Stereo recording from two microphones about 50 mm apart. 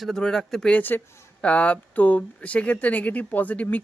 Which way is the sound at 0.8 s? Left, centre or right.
Left.